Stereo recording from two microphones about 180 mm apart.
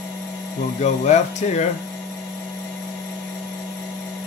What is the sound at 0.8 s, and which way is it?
Speech, 40° left (ahead or behind).